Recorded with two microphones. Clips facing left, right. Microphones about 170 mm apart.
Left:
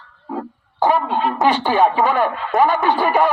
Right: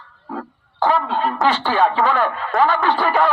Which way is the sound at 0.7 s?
15° left (ahead or behind).